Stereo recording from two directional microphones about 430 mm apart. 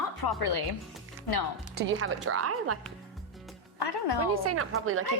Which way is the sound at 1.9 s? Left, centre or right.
Right.